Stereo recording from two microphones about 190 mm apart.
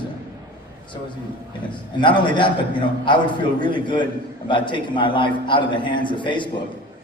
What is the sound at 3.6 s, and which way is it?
A man's voice, 25° left (ahead or behind).